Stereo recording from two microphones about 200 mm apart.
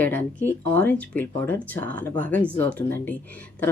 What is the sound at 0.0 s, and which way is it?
Speech, 10° left (ahead or behind).